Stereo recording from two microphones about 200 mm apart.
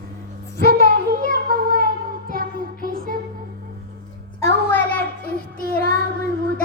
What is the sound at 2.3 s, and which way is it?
Music, 45° right (ahead or behind).